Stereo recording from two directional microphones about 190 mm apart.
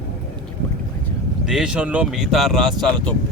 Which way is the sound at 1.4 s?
5° right (ahead or behind).